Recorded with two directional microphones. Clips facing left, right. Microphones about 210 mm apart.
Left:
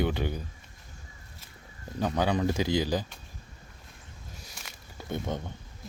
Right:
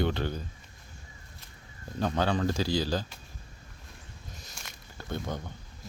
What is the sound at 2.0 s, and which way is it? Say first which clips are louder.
Speech: left 1 dB; 10° left (ahead or behind).